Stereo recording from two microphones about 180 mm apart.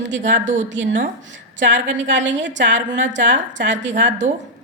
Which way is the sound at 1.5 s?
90° right.